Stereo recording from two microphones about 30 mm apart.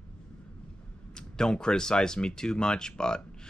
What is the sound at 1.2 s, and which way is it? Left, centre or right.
Speech, left.